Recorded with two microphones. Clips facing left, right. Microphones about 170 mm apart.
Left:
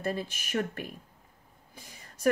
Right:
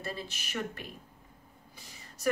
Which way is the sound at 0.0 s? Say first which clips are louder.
Left 7 dB; 50° left (ahead or behind).